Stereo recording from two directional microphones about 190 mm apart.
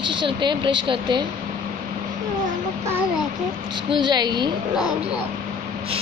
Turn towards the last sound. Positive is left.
turn(degrees=-20)  # may be behind; listen again after turning